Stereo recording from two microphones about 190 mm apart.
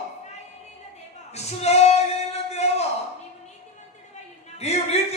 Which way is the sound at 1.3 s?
35° left (ahead or behind).